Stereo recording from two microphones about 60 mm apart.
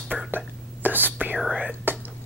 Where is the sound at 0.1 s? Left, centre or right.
Centre.